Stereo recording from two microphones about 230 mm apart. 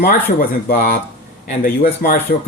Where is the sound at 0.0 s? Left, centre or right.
Left.